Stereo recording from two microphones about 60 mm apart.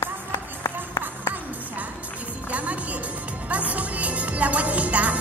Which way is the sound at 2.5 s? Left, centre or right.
Right.